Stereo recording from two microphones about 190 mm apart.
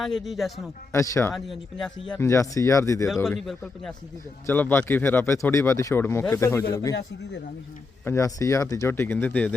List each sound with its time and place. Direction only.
0.0 s speech: centre (ahead or behind)
0.9 s speech: 15° left (ahead or behind)
1.3 s speech: centre (ahead or behind)
2.2 s speech: 15° left (ahead or behind)
3.2 s speech: 5° left (ahead or behind)
8.0 s speech: 15° left (ahead or behind)